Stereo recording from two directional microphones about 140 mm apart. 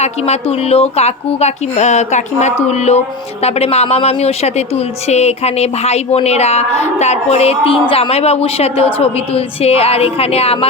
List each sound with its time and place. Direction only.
0.0 s speech: 50° left (ahead or behind)